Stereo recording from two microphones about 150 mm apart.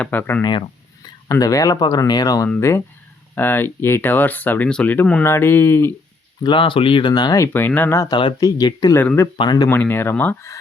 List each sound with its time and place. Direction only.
0.0 s speech: 15° left (ahead or behind)
0.4 s a sound: 30° left (ahead or behind)
1.3 s speech: 25° left (ahead or behind)
6.4 s speech: 35° left (ahead or behind)
9.0 s speech: 15° left (ahead or behind)
9.2 s speech: 25° left (ahead or behind)
9.6 s speech: 15° left (ahead or behind)